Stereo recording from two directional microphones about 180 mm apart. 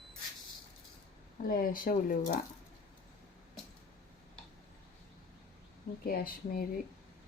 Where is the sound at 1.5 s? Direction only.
55° left (ahead or behind).